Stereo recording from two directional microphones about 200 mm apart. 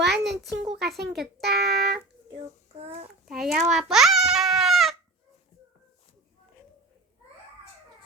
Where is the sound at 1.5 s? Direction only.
55° right (ahead or behind).